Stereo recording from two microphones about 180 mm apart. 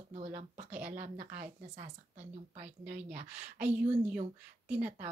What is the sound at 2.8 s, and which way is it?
Speech, 50° right (ahead or behind).